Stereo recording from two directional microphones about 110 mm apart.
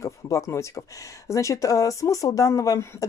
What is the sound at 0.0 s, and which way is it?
Speech, 25° left (ahead or behind).